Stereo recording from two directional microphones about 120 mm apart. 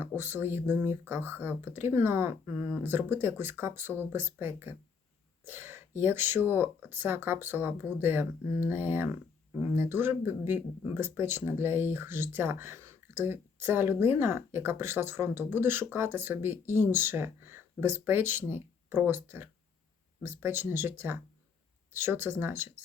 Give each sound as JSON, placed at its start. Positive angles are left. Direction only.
{"t": 0.2, "sound": "speech", "side_deg": -20}